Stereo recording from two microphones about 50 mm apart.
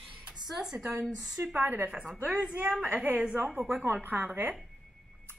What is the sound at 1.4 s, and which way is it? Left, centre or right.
A woman's voice, right.